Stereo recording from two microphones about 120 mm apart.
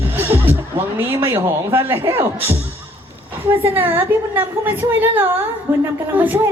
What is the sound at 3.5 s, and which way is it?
A woman's voice, 15° right (ahead or behind).